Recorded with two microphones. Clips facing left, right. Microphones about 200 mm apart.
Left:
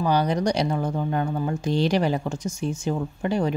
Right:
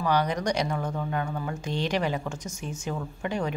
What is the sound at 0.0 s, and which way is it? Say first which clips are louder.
Speech: left 4 dB; 30° left (ahead or behind).